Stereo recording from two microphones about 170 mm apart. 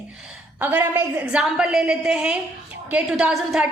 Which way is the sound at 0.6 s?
10° right (ahead or behind).